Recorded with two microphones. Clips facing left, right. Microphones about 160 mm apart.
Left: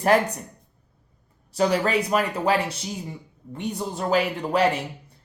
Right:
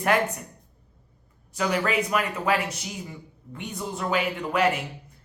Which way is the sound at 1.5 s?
35° left (ahead or behind).